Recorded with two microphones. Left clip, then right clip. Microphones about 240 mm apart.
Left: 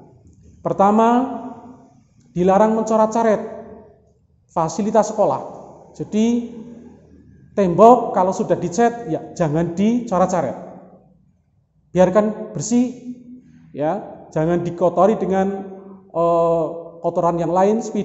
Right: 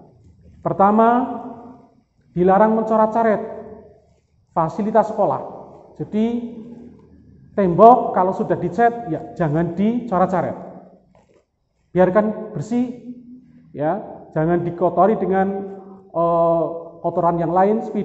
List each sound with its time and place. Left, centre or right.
0.6 s a man's voice: left
2.3 s a man's voice: left
4.7 s a man's voice: left
7.5 s a man's voice: left
11.9 s a man's voice: left
13.7 s a man's voice: left